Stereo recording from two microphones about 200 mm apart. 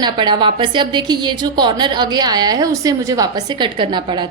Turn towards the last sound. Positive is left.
turn(degrees=-25)  # may be behind; listen again after turning